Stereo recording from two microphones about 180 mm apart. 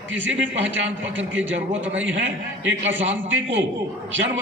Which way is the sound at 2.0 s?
90° right.